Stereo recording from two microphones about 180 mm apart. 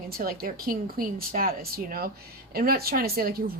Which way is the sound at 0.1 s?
55° right (ahead or behind).